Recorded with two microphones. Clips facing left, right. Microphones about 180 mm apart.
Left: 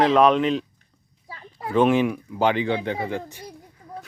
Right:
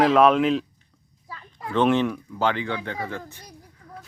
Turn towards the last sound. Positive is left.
turn(degrees=25)  # may be behind; listen again after turning